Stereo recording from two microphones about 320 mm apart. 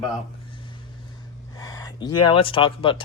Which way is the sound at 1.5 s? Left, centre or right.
Centre.